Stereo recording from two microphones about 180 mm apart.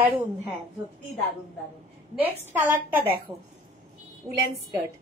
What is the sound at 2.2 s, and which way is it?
A woman's voice, 10° right (ahead or behind).